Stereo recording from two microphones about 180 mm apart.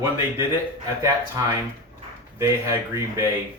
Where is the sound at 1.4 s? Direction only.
20° right (ahead or behind).